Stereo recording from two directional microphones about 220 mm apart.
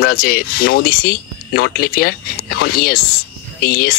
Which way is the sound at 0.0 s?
40° left (ahead or behind).